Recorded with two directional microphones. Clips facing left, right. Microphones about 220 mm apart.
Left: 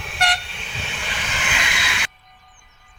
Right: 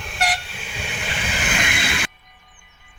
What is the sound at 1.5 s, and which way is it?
Train, 55° right (ahead or behind).